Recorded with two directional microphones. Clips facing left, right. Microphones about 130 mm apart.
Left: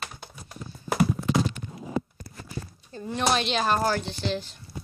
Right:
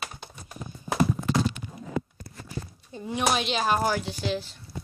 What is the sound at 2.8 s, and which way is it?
Speech, 10° right (ahead or behind).